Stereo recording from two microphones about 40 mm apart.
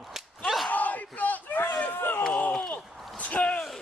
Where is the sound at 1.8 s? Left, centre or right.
Left.